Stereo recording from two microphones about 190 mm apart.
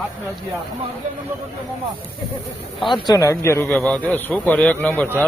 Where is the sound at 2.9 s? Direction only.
20° left (ahead or behind).